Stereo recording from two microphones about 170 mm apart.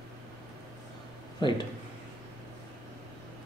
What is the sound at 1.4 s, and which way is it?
Speech, 25° left (ahead or behind).